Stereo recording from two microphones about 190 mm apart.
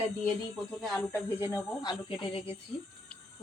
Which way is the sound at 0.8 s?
5° left (ahead or behind).